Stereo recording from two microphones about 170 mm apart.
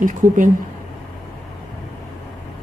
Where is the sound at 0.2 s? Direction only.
15° right (ahead or behind).